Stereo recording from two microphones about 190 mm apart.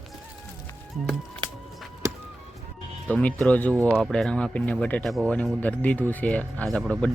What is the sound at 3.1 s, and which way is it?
Speech, 5° left (ahead or behind).